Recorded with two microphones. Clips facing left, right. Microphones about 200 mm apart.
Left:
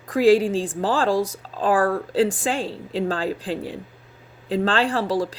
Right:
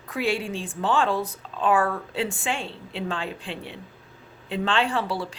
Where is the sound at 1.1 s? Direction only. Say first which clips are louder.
Left 6 dB; 90° left.